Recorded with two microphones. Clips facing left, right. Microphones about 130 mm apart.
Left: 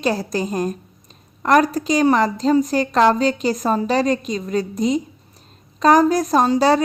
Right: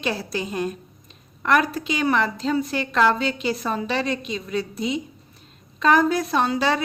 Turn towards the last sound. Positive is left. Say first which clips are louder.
# left 6 dB
turn(degrees=35)  # may be behind; listen again after turning